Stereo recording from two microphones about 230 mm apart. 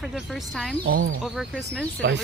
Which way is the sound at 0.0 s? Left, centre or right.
Centre.